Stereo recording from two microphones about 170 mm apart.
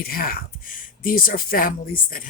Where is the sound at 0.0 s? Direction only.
60° left (ahead or behind).